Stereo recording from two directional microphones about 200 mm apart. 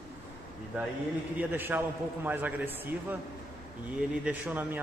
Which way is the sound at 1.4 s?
10° right (ahead or behind).